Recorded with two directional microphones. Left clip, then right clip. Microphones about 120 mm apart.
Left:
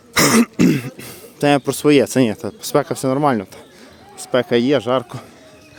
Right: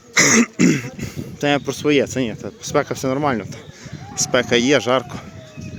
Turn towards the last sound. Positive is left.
turn(degrees=15)  # may be behind; listen again after turning